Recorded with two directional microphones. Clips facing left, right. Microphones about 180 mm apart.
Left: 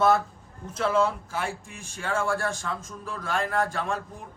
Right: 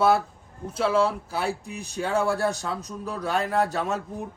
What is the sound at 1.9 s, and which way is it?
A man's voice, 20° right (ahead or behind).